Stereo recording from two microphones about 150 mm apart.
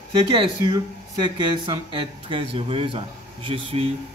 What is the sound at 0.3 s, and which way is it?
Speech, 35° right (ahead or behind).